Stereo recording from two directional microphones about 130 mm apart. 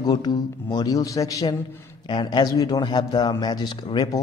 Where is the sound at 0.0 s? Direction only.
30° left (ahead or behind).